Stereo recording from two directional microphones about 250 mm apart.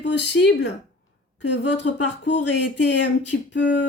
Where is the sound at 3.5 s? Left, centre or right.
Left.